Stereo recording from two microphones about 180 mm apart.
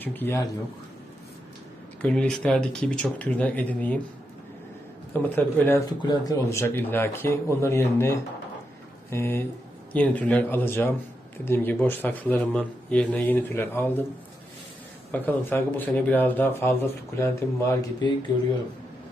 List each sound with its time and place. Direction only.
0.0 s speech: 10° left (ahead or behind)
2.0 s speech: 5° left (ahead or behind)
5.1 s speech: 10° left (ahead or behind)
6.0 s speech: 20° left (ahead or behind)
15.1 s speech: 10° left (ahead or behind)